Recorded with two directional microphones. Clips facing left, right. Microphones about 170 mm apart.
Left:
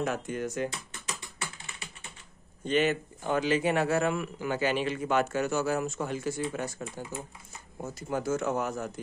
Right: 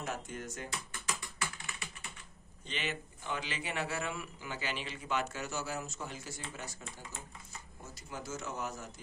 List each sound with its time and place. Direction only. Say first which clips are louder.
0.0 s speech: left 9 dB; 70° left (ahead or behind)
0.7 s typing: left 3 dB; 25° left (ahead or behind)
2.6 s a man's voice: left 14 dB; 50° left (ahead or behind)